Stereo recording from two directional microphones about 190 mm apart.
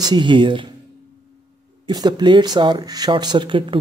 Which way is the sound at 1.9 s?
20° right (ahead or behind).